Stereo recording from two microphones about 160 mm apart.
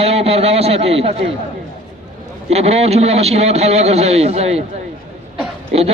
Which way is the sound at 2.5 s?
40° right (ahead or behind).